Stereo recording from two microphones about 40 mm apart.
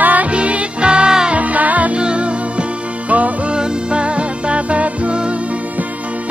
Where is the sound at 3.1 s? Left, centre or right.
Right.